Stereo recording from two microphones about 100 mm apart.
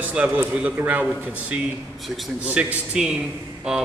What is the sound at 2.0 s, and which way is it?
Speech, centre (ahead or behind).